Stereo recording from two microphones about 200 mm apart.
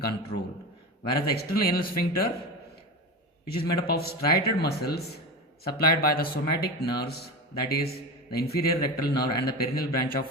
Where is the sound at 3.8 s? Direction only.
50° left (ahead or behind).